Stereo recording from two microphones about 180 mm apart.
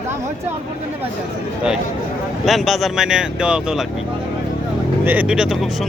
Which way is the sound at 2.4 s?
Centre (ahead or behind).